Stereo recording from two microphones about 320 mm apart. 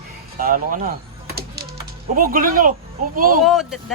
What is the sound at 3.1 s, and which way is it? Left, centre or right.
Speech, right.